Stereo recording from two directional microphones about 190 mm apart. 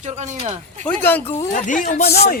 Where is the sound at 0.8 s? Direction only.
10° left (ahead or behind).